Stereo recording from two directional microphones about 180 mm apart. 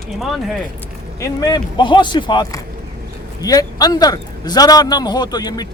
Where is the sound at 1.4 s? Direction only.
25° left (ahead or behind).